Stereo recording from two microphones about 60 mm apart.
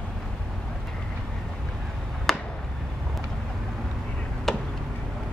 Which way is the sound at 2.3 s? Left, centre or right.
Centre.